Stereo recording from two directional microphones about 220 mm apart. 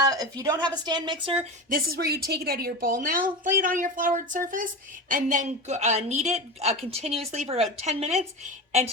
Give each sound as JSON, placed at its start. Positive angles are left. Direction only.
{"t": 0.0, "sound": "speech", "side_deg": -15}
{"t": 1.7, "sound": "a woman's voice", "side_deg": -45}